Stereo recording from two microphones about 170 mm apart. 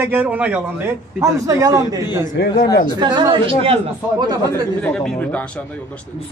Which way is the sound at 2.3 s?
70° left (ahead or behind).